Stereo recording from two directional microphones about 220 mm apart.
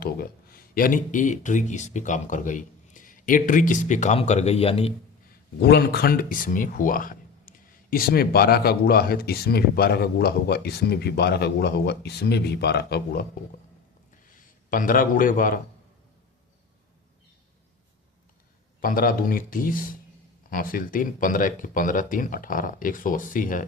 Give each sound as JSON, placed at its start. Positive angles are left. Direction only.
{"t": 0.0, "sound": "speech", "side_deg": 40}
{"t": 5.5, "sound": "speech", "side_deg": 45}
{"t": 14.3, "sound": "a man's voice", "side_deg": 35}
{"t": 18.8, "sound": "speech", "side_deg": 40}